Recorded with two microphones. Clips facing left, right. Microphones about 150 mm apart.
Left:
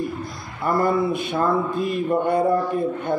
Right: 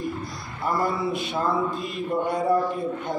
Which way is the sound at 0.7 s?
50° left (ahead or behind).